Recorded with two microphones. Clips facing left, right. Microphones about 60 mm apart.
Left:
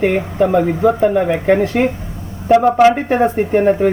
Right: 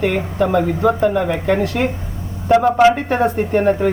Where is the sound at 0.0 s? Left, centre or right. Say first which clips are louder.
Left 3 dB; centre.